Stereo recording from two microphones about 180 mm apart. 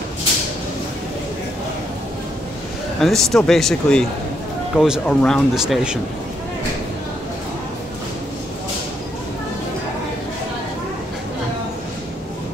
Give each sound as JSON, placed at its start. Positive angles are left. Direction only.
{"t": 3.0, "sound": "speech", "side_deg": 0}